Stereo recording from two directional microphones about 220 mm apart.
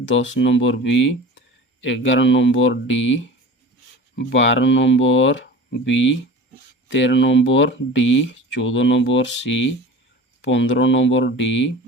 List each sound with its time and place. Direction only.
0.0 s speech: 55° left (ahead or behind)